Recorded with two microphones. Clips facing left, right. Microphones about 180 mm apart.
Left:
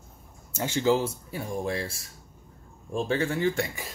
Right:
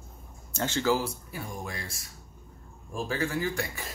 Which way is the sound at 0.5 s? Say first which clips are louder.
Left 3 dB; 10° left (ahead or behind).